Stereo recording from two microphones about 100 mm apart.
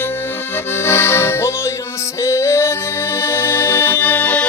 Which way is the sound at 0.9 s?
25° left (ahead or behind).